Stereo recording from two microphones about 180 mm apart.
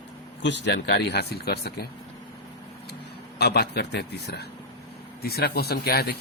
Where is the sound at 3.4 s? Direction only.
65° left (ahead or behind).